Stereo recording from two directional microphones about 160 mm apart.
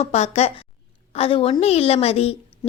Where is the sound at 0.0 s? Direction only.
40° left (ahead or behind).